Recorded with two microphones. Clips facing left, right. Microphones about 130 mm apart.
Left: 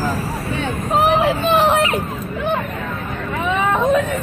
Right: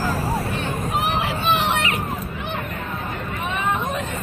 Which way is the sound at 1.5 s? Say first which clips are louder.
Left 5 dB; 40° left (ahead or behind).